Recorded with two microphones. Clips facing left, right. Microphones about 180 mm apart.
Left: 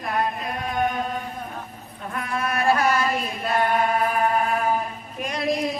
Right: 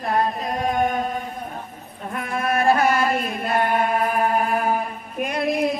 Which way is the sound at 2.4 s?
50° right (ahead or behind).